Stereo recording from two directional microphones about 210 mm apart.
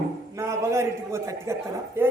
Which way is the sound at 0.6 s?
15° right (ahead or behind).